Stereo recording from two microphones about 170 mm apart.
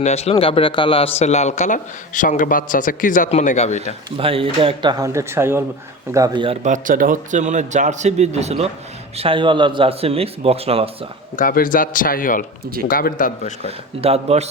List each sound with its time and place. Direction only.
0.0 s a man's voice: 40° left (ahead or behind)
4.2 s speech: 35° right (ahead or behind)
11.3 s a man's voice: 55° left (ahead or behind)
13.7 s speech: 35° right (ahead or behind)